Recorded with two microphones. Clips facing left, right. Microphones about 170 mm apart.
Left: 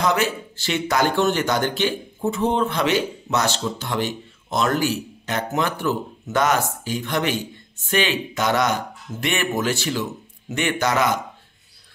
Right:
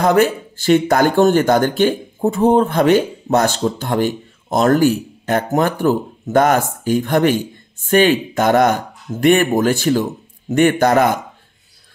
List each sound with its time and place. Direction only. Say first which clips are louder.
0.0 s speech: right 8 dB; 50° right (ahead or behind)